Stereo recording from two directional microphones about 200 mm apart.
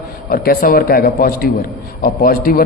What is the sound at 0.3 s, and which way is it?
A man's voice, 45° left (ahead or behind).